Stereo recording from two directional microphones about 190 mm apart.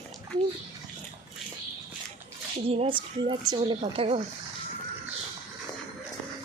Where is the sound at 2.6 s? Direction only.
30° right (ahead or behind).